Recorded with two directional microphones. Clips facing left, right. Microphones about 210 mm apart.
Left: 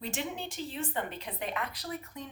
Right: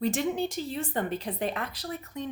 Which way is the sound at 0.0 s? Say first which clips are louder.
Right 9 dB; 40° right (ahead or behind).